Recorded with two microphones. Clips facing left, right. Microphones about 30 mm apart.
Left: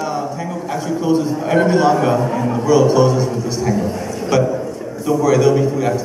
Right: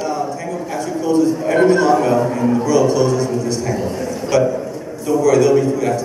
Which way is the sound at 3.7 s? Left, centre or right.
Centre.